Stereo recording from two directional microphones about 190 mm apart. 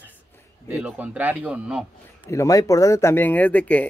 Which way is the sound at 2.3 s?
15° left (ahead or behind).